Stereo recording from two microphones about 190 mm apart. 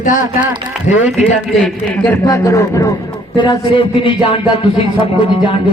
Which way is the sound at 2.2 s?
15° left (ahead or behind).